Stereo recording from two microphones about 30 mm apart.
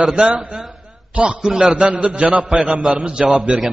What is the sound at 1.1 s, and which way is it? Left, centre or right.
Speech, right.